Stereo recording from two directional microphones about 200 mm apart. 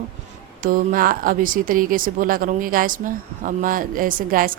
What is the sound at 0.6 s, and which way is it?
Speech, 45° right (ahead or behind).